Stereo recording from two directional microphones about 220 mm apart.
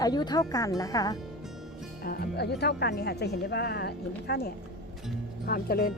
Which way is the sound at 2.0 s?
45° left (ahead or behind).